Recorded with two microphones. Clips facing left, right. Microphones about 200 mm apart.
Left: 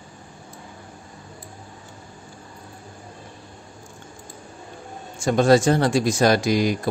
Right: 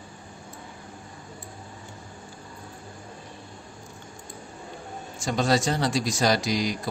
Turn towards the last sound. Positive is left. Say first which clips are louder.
# left 6 dB
turn(degrees=55)  # may be behind; listen again after turning